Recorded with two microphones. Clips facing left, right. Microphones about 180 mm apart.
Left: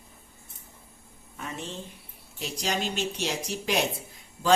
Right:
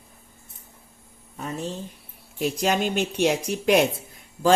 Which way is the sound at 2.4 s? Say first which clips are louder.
Right 8 dB; 55° right (ahead or behind).